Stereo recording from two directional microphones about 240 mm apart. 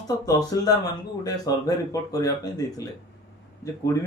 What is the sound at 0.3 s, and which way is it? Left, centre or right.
Speech, centre.